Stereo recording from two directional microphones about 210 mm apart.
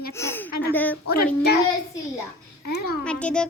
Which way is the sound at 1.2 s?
50° left (ahead or behind).